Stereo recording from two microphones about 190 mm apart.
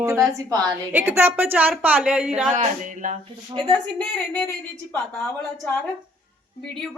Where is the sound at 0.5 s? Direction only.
10° right (ahead or behind).